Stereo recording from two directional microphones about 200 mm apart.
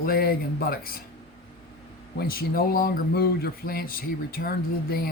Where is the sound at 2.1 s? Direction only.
50° left (ahead or behind).